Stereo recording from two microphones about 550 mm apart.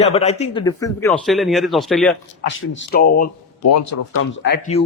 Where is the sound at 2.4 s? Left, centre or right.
Centre.